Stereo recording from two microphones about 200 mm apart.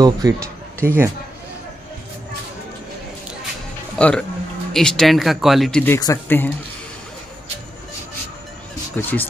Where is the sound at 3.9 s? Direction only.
5° left (ahead or behind).